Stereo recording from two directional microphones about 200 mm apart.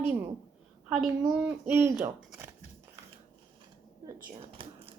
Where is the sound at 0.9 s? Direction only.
5° right (ahead or behind).